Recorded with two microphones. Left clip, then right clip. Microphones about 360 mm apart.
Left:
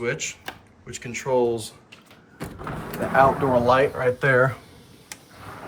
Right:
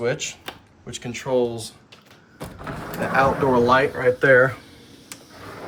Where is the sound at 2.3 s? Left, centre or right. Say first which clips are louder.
Even; centre.